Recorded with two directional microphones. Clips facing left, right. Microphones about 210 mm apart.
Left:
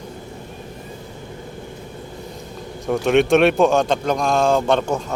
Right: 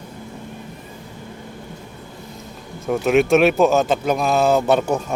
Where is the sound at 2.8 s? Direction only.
5° right (ahead or behind).